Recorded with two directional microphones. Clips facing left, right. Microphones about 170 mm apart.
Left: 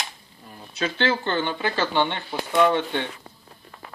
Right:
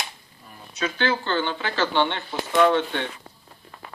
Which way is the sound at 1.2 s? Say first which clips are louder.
Left 1 dB; 15° left (ahead or behind).